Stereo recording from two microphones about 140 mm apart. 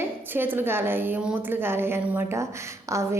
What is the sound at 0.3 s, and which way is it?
A woman's voice, 15° right (ahead or behind).